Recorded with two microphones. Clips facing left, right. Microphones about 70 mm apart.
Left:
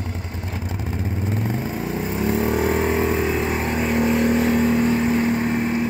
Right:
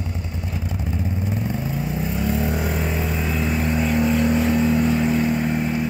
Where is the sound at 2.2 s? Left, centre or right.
Left.